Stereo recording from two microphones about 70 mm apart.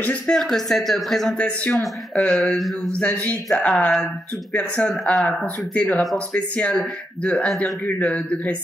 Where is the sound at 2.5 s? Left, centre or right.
Centre.